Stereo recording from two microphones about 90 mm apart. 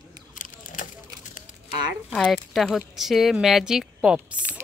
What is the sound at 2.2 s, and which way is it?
Speech, centre (ahead or behind).